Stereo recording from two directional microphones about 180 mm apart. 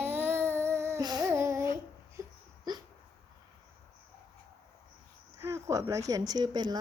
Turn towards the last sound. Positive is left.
turn(degrees=-25)  # may be behind; listen again after turning